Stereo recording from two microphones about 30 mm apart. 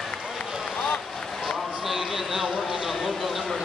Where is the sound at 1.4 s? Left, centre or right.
Centre.